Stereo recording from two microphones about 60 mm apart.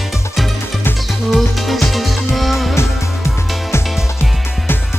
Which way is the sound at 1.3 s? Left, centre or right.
Centre.